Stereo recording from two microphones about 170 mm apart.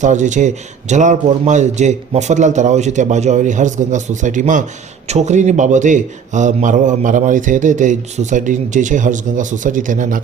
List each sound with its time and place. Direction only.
0.0 s a man's voice: 45° right (ahead or behind)